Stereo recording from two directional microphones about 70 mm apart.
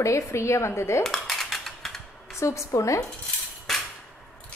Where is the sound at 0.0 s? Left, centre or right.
Left.